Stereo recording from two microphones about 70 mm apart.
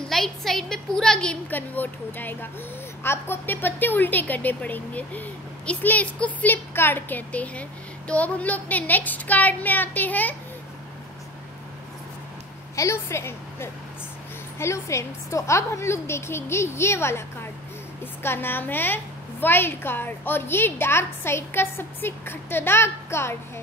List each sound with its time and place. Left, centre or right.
0.1 s a woman's voice: centre
1.5 s a woman's voice: left
12.7 s a woman's voice: left
18.2 s a woman's voice: left